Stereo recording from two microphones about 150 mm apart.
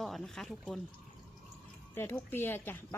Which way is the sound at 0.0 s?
Centre (ahead or behind).